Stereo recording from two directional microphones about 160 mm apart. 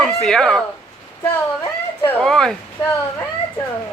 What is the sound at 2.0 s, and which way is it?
Speech, 5° left (ahead or behind).